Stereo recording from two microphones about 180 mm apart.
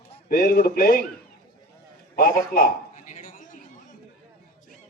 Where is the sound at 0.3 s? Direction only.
55° left (ahead or behind).